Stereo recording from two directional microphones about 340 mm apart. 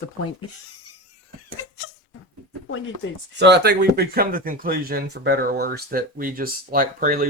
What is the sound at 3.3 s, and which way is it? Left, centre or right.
Speech, right.